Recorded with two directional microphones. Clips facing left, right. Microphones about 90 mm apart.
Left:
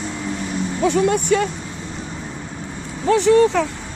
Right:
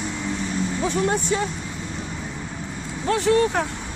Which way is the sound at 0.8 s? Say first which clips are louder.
Left 7 dB; 70° left (ahead or behind).